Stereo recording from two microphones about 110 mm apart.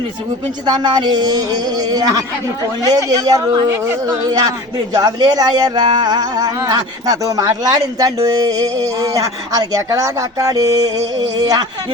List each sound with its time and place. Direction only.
0.6 s speech: 40° right (ahead or behind)
4.9 s speech: 35° right (ahead or behind)